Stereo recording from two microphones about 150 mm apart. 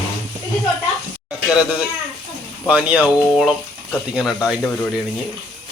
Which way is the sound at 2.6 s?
10° right (ahead or behind).